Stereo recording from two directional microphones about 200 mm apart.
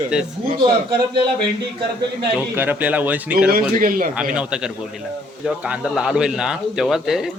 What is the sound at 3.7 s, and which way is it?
Speech, 45° right (ahead or behind).